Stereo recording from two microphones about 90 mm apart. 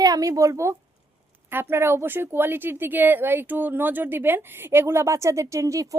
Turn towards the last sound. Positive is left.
turn(degrees=-35)  # may be behind; listen again after turning